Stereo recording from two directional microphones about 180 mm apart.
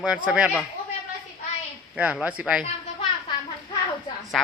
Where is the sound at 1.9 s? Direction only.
5° right (ahead or behind).